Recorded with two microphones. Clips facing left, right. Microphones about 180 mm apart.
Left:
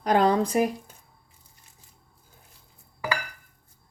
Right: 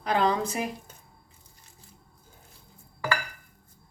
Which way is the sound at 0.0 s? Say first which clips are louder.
Left 4 dB; 45° left (ahead or behind).